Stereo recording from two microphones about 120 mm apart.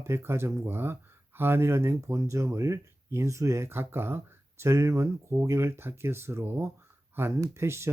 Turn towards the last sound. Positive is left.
turn(degrees=-20)  # may be behind; listen again after turning